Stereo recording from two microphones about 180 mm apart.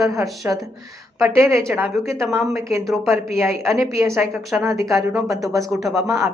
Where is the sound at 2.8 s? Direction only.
Centre (ahead or behind).